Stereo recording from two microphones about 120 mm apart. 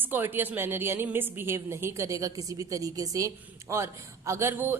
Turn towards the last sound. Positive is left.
turn(degrees=-20)  # may be behind; listen again after turning